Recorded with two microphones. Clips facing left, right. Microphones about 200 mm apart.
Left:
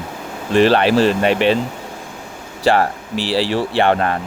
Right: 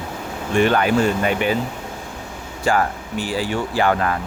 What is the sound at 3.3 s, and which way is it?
Speech, 85° left.